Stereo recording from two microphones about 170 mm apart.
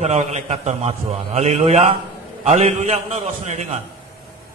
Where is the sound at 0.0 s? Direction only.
40° right (ahead or behind).